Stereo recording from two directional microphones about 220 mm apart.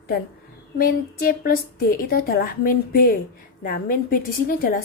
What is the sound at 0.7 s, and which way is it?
A woman's voice, 40° left (ahead or behind).